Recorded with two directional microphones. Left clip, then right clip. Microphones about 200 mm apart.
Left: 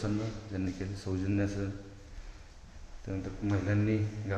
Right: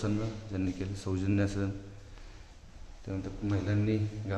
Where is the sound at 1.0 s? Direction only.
20° right (ahead or behind).